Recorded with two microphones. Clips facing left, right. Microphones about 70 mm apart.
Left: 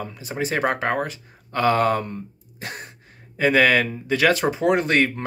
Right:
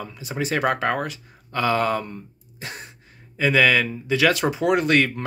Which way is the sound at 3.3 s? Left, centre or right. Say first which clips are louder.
Left 1 dB; left.